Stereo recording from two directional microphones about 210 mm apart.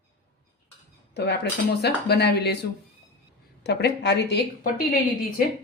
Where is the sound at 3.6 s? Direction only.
55° left (ahead or behind).